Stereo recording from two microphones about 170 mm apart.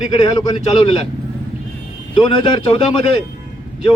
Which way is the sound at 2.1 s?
25° left (ahead or behind).